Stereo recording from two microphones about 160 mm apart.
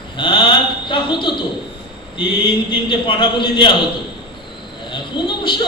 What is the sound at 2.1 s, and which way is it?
A man's voice, 30° left (ahead or behind).